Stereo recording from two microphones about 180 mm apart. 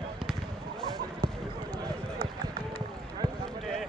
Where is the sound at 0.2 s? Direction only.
5° right (ahead or behind).